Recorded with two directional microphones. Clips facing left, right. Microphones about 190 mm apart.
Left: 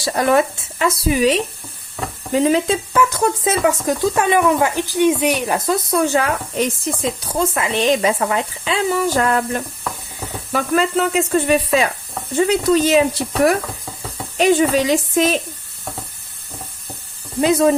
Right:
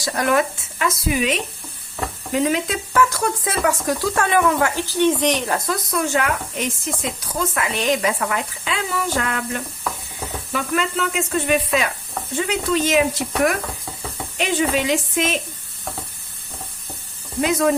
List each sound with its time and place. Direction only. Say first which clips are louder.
0.0 s speech: left 4 dB; 30° left (ahead or behind); by 5.5 s 10° left (ahead or behind)
5.5 s speech: left 5 dB; 25° left (ahead or behind)
9.9 s hiss: even; centre (ahead or behind)
10.5 s speech: left 6 dB; 35° left (ahead or behind)
14.3 s speech: left 6 dB; 40° left (ahead or behind)
17.4 s speech: left 5 dB; 30° left (ahead or behind)